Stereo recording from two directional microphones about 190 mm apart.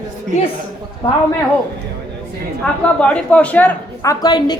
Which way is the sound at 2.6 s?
5° left (ahead or behind).